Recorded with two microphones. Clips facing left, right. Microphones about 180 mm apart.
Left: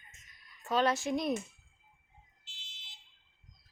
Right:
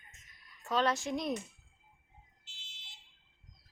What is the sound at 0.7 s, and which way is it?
Speech, 5° left (ahead or behind).